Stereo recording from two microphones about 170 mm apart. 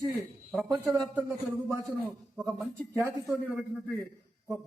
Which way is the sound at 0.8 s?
15° right (ahead or behind).